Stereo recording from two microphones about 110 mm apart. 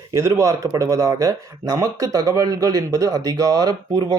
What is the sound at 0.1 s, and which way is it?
Speech, 30° right (ahead or behind).